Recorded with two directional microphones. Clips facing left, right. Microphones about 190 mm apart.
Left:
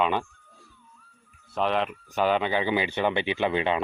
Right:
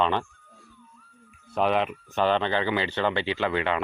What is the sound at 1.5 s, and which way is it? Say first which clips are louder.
Speech: right 2 dB; 5° right (ahead or behind).